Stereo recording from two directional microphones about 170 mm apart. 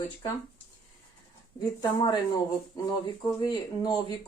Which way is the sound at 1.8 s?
25° left (ahead or behind).